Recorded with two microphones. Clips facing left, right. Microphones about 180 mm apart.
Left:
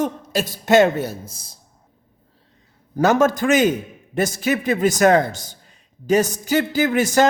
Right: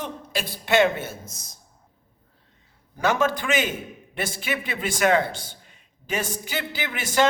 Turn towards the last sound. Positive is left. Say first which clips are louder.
# left 7 dB
turn(degrees=45)  # may be behind; listen again after turning